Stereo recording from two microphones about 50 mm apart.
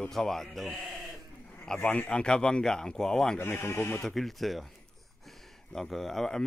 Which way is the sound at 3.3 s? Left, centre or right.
Left.